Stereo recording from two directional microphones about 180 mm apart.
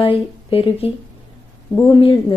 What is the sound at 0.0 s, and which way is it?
A woman's voice, 30° left (ahead or behind).